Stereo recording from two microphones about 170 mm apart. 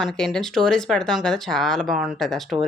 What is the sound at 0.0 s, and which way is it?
Speech, centre (ahead or behind).